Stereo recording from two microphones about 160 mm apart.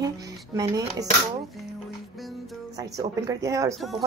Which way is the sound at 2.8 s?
20° right (ahead or behind).